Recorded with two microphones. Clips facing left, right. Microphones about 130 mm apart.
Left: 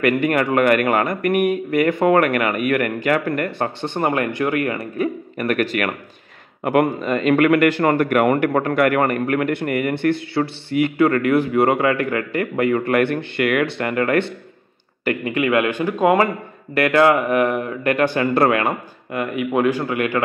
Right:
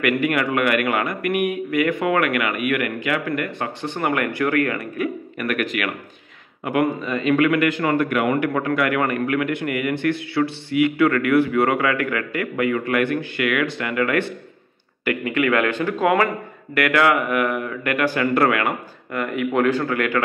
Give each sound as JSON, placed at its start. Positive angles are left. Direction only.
{"t": 0.0, "sound": "a man's voice", "side_deg": 35}
{"t": 6.6, "sound": "a man's voice", "side_deg": 50}
{"t": 15.0, "sound": "speech", "side_deg": 25}